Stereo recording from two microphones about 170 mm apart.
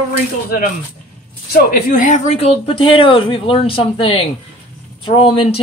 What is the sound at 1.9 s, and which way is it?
Speech, 45° left (ahead or behind).